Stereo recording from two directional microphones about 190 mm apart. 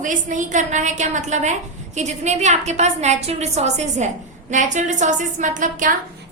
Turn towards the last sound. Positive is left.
turn(degrees=-40)  # may be behind; listen again after turning